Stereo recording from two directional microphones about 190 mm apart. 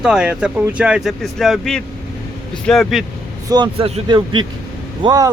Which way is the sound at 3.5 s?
25° right (ahead or behind).